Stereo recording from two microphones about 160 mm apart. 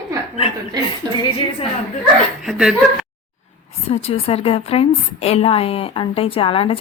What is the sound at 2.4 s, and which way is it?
Speech, 5° right (ahead or behind).